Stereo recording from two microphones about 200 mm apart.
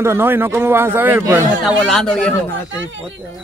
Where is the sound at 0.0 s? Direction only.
10° right (ahead or behind).